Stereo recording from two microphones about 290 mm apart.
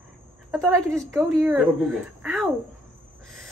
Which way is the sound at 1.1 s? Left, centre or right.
Centre.